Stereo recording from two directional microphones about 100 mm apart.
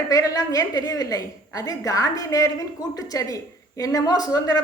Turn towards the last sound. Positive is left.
turn(degrees=40)  # may be behind; listen again after turning